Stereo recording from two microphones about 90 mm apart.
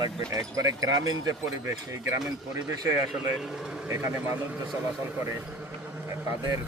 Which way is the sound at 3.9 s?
25° right (ahead or behind).